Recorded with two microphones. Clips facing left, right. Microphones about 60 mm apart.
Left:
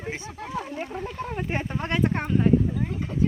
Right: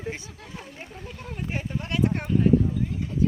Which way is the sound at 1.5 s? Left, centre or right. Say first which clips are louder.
Left 1 dB; left.